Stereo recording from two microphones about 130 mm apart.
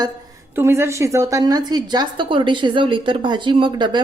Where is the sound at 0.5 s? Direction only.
20° right (ahead or behind).